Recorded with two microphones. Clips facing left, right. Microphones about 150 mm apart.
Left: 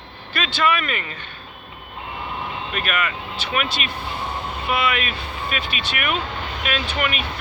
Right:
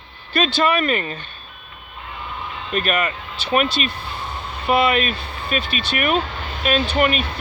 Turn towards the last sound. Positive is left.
turn(degrees=-35)  # may be behind; listen again after turning